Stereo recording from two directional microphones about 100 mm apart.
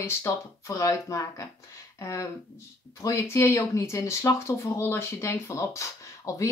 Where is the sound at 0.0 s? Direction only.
30° left (ahead or behind).